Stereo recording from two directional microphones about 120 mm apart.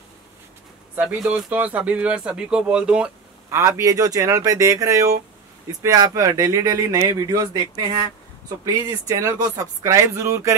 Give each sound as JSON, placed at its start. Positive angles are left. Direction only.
{"t": 0.9, "sound": "speech", "side_deg": -5}
{"t": 3.4, "sound": "speech", "side_deg": -20}